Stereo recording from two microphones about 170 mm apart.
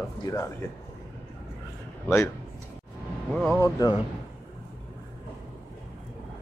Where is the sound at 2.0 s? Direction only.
15° left (ahead or behind).